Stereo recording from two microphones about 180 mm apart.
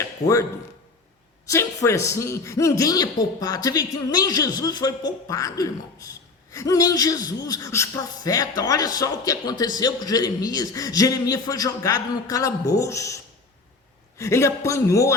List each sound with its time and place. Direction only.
0.0 s a sound: 15° left (ahead or behind)
1.5 s a man's voice: 15° left (ahead or behind)
14.2 s a man's voice: 15° left (ahead or behind)